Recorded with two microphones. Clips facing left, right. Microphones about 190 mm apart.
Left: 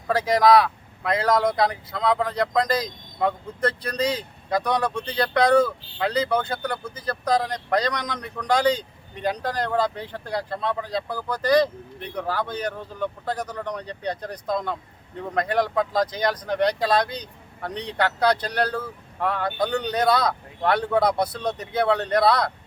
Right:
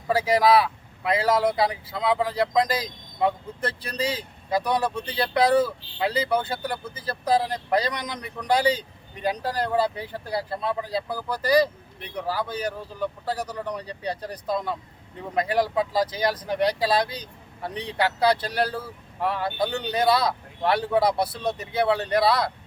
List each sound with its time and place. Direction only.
0.1 s speech: 5° right (ahead or behind)